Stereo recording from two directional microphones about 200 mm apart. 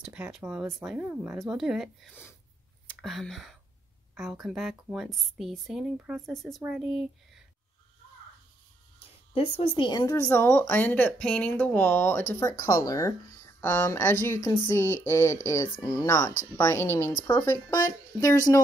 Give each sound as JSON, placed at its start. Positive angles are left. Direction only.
{"t": 0.0, "sound": "speech", "side_deg": -5}
{"t": 9.3, "sound": "speech", "side_deg": 25}